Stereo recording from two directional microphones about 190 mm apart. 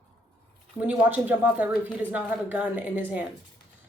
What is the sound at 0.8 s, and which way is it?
A woman's voice, 10° right (ahead or behind).